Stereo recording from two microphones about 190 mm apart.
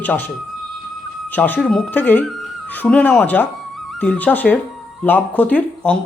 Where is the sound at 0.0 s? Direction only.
10° left (ahead or behind).